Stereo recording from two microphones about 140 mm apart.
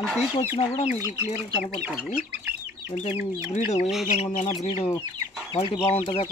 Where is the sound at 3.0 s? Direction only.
55° left (ahead or behind).